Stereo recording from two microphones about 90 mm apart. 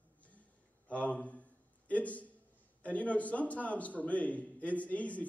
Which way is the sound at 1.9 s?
15° left (ahead or behind).